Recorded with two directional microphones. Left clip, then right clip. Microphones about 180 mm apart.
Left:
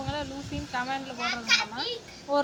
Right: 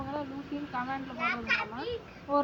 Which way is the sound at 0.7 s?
20° left (ahead or behind).